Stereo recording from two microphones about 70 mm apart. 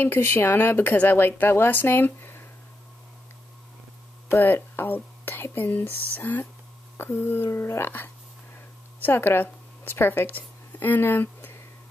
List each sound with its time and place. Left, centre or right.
0.0 s speech: left
4.3 s speech: left
8.5 s a sound: left